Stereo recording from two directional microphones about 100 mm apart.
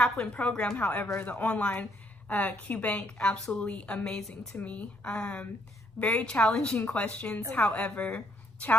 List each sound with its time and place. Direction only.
0.0 s a woman's voice: 10° left (ahead or behind)